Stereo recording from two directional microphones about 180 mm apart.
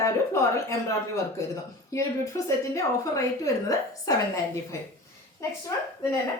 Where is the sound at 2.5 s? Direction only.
15° left (ahead or behind).